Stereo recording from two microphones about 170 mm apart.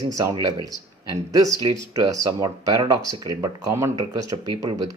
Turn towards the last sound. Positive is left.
turn(degrees=-20)  # may be behind; listen again after turning